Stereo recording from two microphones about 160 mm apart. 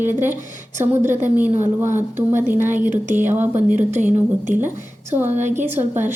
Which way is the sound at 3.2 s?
15° right (ahead or behind).